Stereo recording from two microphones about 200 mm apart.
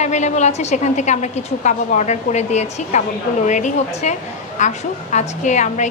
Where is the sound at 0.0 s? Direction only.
35° left (ahead or behind).